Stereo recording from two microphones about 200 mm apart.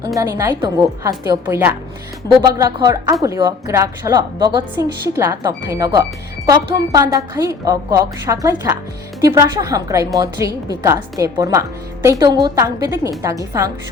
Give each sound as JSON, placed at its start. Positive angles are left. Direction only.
{"t": 0.2, "sound": "a woman's voice", "side_deg": -15}